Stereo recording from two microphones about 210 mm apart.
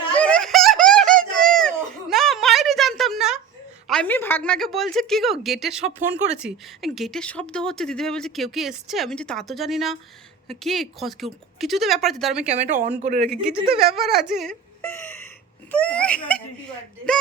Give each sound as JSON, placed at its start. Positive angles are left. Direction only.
{"t": 0.1, "sound": "a sound", "side_deg": 5}
{"t": 3.8, "sound": "speech", "side_deg": 5}
{"t": 12.5, "sound": "speech", "side_deg": -35}
{"t": 13.9, "sound": "speech", "side_deg": 0}